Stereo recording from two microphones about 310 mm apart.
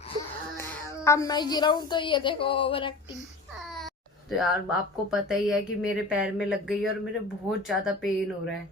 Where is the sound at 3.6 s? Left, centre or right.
Centre.